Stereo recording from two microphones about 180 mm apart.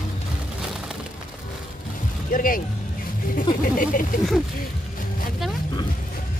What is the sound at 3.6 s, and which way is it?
Speech, 50° left (ahead or behind).